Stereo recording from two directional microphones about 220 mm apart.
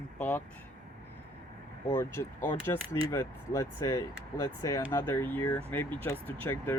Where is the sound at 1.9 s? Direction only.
10° left (ahead or behind).